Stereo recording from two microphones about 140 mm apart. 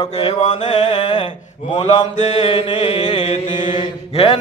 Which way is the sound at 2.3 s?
40° left (ahead or behind).